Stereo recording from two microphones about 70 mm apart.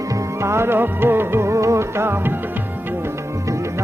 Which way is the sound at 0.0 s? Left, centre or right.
Right.